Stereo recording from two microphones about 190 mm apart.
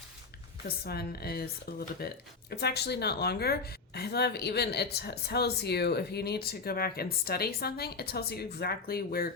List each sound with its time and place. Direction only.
0.9 s a woman's voice: 55° left (ahead or behind)